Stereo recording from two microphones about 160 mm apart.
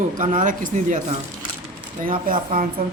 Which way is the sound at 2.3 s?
55° right (ahead or behind).